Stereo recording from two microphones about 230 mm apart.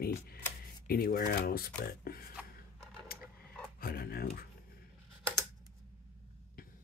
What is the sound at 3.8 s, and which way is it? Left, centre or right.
Dog, left.